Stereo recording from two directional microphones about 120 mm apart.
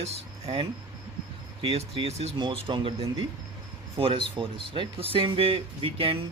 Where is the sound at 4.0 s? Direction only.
50° right (ahead or behind).